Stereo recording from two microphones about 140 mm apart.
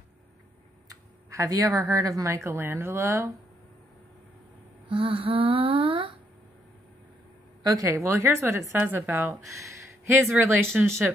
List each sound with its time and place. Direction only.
0.8 s speech: 20° right (ahead or behind)
4.8 s a sound: 40° right (ahead or behind)
7.6 s a woman's voice: 25° right (ahead or behind)